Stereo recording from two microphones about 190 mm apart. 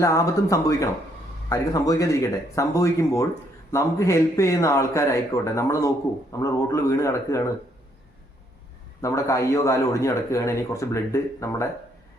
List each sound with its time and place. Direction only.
0.0 s a man's voice: 15° left (ahead or behind)
9.0 s a man's voice: 15° left (ahead or behind)